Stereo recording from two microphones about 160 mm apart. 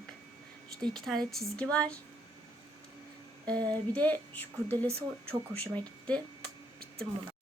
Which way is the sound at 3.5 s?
25° right (ahead or behind).